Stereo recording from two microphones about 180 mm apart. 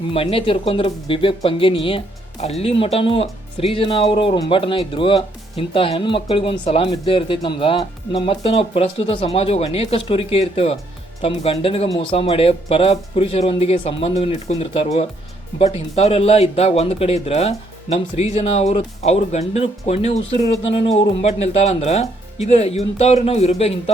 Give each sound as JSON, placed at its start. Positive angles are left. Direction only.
{"t": 0.1, "sound": "speech", "side_deg": 30}